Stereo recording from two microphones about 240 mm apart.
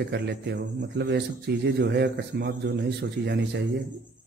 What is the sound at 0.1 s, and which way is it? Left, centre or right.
A man's voice, right.